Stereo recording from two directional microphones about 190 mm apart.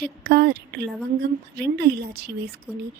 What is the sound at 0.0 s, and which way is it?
Speech, 55° right (ahead or behind).